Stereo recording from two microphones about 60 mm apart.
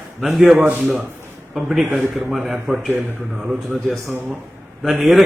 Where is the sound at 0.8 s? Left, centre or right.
Centre.